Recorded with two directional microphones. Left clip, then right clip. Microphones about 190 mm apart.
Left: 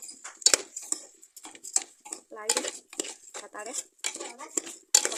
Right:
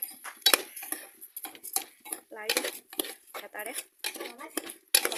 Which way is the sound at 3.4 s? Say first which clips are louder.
Right 1 dB; 5° right (ahead or behind).